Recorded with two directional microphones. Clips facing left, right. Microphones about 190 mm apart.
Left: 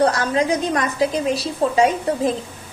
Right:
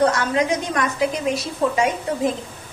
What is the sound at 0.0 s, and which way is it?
A woman's voice, 35° left (ahead or behind).